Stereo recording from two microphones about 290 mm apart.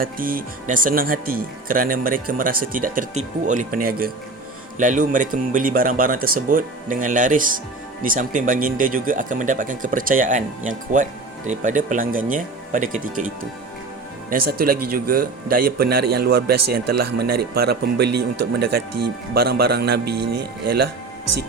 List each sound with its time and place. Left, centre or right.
0.0 s speech: right
18.1 s speech: right
18.5 s speech: right
20.1 s speech: right